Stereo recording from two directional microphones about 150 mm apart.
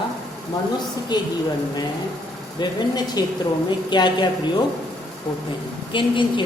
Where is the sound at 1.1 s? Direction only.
30° left (ahead or behind).